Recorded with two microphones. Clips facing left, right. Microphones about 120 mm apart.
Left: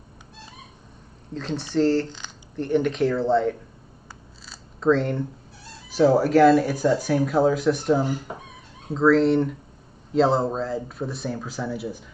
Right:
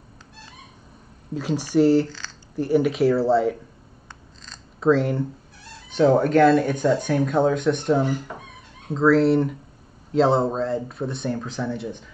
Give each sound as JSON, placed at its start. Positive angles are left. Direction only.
{"t": 1.3, "sound": "speech", "side_deg": -10}
{"t": 2.0, "sound": "a sound", "side_deg": 20}
{"t": 2.5, "sound": "speech", "side_deg": -5}
{"t": 4.7, "sound": "speech", "side_deg": -5}